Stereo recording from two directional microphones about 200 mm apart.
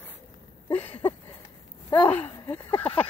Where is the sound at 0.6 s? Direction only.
25° left (ahead or behind).